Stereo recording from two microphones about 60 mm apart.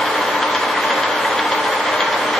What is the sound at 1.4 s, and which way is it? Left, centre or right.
Train, centre.